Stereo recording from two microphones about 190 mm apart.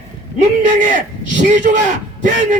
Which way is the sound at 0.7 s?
40° right (ahead or behind).